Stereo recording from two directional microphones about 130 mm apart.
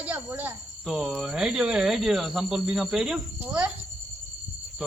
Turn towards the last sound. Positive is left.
turn(degrees=-10)  # may be behind; listen again after turning